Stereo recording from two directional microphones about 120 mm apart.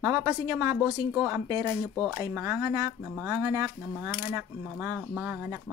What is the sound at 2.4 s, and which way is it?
A woman's voice, 20° right (ahead or behind).